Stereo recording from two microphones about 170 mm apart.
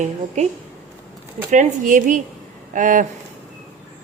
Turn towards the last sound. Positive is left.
turn(degrees=-50)  # may be behind; listen again after turning